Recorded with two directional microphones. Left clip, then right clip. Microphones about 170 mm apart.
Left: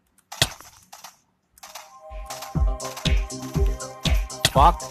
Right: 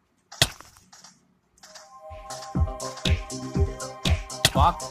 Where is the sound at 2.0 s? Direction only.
Centre (ahead or behind).